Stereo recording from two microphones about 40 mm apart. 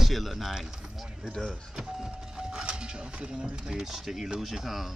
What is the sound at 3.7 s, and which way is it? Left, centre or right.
Speech, centre.